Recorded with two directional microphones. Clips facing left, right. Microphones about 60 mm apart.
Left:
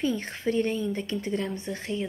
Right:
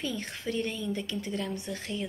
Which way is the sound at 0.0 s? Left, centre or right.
Left.